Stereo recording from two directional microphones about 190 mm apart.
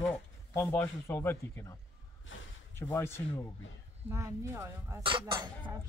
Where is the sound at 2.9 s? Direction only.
15° left (ahead or behind).